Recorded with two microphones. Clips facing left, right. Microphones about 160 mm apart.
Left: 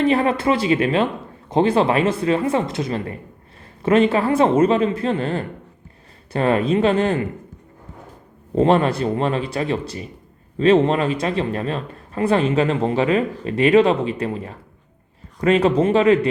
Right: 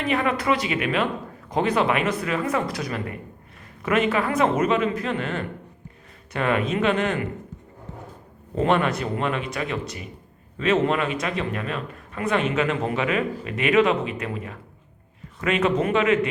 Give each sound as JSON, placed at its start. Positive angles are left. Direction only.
{"t": 0.0, "sound": "speech", "side_deg": 30}
{"t": 8.5, "sound": "speech", "side_deg": 30}